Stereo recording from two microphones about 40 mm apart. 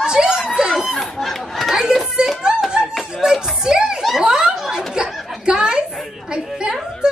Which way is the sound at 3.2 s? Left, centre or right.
Centre.